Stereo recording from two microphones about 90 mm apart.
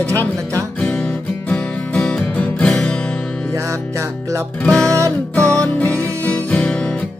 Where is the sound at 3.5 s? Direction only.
35° right (ahead or behind).